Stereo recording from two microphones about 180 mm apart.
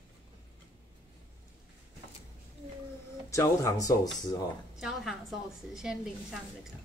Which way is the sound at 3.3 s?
15° left (ahead or behind).